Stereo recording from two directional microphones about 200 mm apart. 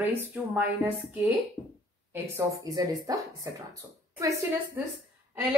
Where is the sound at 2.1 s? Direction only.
15° right (ahead or behind).